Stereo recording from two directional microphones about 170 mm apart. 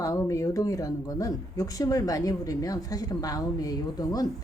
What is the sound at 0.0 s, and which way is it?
Speech, 20° left (ahead or behind).